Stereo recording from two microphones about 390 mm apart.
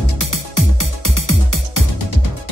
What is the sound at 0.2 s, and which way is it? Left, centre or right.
Music, left.